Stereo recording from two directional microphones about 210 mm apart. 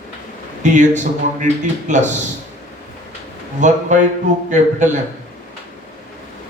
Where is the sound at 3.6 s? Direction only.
35° right (ahead or behind).